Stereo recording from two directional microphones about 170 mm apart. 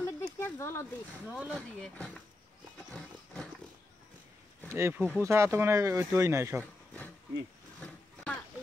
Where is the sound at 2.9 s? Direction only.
5° left (ahead or behind).